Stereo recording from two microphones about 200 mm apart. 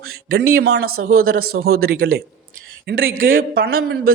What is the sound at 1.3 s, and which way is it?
A man's voice, 50° right (ahead or behind).